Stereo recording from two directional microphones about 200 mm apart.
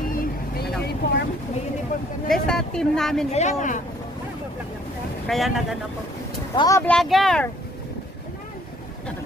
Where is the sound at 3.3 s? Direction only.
35° left (ahead or behind).